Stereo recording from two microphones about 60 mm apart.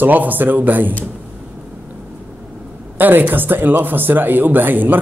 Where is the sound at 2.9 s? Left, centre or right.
Right.